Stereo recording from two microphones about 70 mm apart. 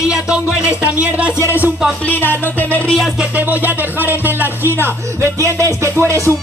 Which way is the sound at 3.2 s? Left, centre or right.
Right.